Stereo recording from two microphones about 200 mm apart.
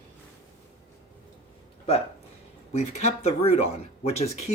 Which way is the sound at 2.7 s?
35° left (ahead or behind).